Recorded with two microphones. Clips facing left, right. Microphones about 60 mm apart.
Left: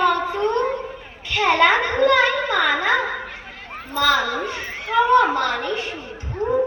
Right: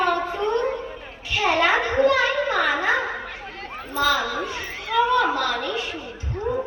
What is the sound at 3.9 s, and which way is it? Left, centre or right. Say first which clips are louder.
Speech: left 3 dB; left.